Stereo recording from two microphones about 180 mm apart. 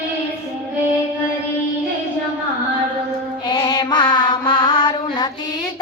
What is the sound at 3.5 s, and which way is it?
Music, 25° left (ahead or behind).